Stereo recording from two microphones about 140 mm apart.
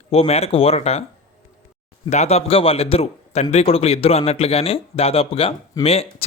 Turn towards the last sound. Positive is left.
turn(degrees=45)  # may be behind; listen again after turning